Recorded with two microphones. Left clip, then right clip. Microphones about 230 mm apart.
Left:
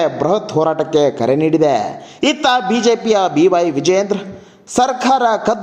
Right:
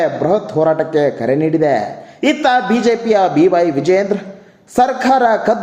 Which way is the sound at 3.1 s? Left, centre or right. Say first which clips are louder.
Right 3 dB; left.